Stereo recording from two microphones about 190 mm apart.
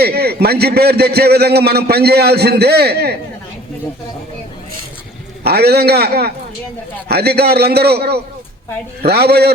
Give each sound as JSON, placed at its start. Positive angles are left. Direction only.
{"t": 0.0, "sound": "a man's voice", "side_deg": -55}
{"t": 5.4, "sound": "a man's voice", "side_deg": -55}